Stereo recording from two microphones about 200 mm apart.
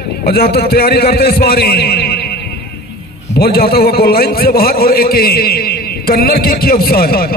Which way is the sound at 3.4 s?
50° left (ahead or behind).